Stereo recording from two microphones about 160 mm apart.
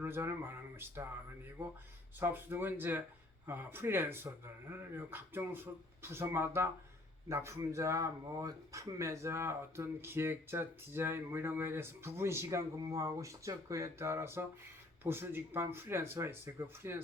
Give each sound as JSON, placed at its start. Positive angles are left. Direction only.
{"t": 0.0, "sound": "speech", "side_deg": -15}
{"t": 2.1, "sound": "speech", "side_deg": -15}